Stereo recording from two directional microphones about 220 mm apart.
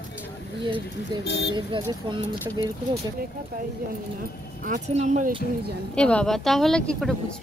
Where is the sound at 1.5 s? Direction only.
20° right (ahead or behind).